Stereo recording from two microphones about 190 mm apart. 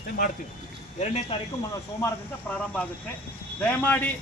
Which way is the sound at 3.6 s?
10° left (ahead or behind).